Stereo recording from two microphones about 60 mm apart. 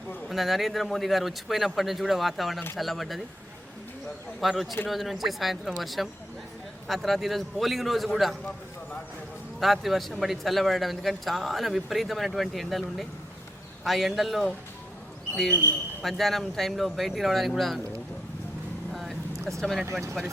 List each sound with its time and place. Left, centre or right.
0.3 s a man's voice: centre
4.4 s a man's voice: centre
9.6 s a man's voice: centre
16.0 s a man's voice: centre
18.9 s vehicle: centre
19.8 s speech: right